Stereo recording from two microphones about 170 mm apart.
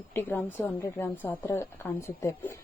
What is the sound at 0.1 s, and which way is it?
A woman's voice, 10° left (ahead or behind).